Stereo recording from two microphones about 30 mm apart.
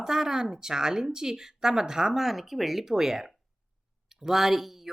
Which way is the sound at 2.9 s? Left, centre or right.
Centre.